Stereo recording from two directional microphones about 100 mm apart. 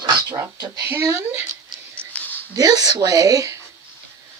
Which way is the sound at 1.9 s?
10° left (ahead or behind).